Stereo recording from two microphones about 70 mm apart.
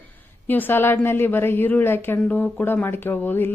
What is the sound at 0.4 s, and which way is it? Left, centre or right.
A woman's voice, left.